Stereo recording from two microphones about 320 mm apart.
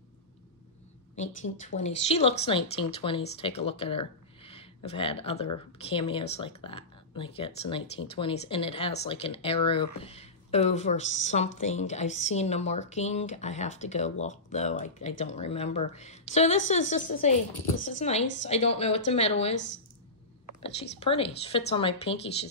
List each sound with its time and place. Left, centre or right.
1.6 s speech: left
19.5 s speech: left
21.0 s speech: centre